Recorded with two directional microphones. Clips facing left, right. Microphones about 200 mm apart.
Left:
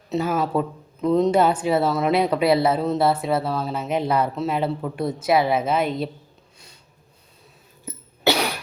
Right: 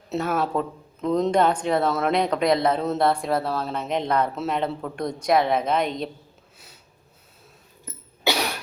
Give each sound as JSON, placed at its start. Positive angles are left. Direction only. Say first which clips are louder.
{"t": 0.1, "sound": "speech", "louder": "left 2 dB", "side_deg": 0}